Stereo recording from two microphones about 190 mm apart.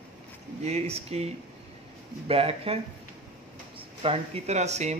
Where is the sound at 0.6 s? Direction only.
35° right (ahead or behind).